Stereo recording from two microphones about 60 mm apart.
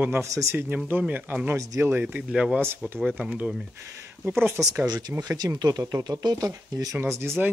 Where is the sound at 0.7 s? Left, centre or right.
Right.